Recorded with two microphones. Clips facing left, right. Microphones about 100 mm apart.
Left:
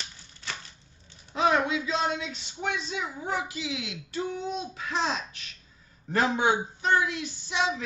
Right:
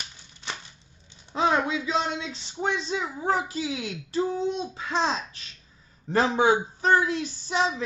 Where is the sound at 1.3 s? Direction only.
30° right (ahead or behind).